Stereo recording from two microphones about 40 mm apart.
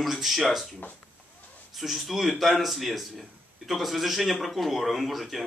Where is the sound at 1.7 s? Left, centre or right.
Centre.